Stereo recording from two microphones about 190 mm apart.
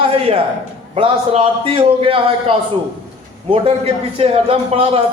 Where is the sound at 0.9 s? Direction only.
30° right (ahead or behind).